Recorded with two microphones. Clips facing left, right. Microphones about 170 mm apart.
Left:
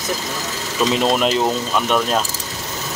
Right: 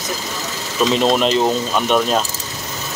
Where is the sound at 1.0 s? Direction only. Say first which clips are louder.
Right 2 dB; 5° left (ahead or behind).